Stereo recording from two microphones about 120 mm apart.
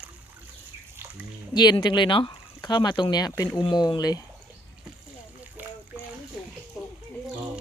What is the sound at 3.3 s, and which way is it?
Speech, 20° left (ahead or behind).